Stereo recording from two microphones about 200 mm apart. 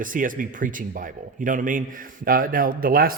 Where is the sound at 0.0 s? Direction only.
40° right (ahead or behind).